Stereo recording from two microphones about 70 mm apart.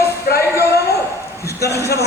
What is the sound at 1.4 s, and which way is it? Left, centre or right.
Speech, left.